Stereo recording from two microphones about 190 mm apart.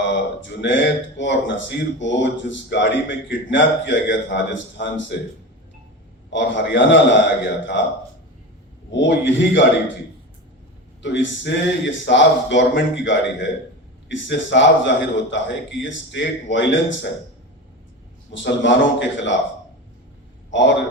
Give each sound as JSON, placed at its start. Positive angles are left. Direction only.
{"t": 0.6, "sound": "speech", "side_deg": 70}
{"t": 6.3, "sound": "speech", "side_deg": 70}
{"t": 11.0, "sound": "speech", "side_deg": 70}
{"t": 18.3, "sound": "speech", "side_deg": 75}
{"t": 20.5, "sound": "speech", "side_deg": 70}